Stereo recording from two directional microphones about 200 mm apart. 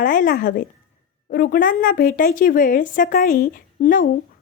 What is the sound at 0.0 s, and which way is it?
A woman's voice, 40° left (ahead or behind).